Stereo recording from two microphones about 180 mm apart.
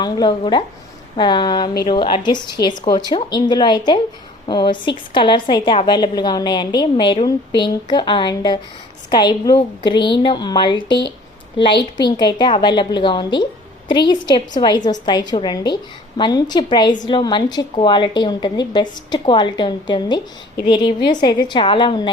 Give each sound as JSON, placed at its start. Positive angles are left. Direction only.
{"t": 0.0, "sound": "a woman's voice", "side_deg": 25}